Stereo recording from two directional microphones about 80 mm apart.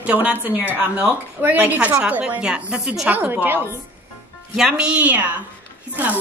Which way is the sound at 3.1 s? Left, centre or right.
Right.